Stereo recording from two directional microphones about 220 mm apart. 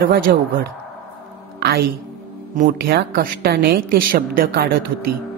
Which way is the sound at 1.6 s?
45° right (ahead or behind).